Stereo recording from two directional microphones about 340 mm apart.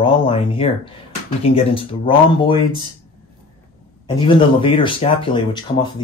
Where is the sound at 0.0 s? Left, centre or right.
Centre.